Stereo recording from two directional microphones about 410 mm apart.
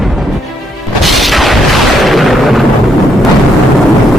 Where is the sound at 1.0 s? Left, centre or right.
Centre.